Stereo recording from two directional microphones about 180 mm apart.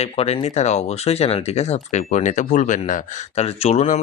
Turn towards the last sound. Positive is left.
turn(degrees=35)  # may be behind; listen again after turning